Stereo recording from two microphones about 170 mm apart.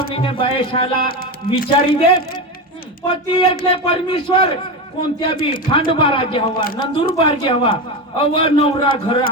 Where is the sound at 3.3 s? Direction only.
35° left (ahead or behind).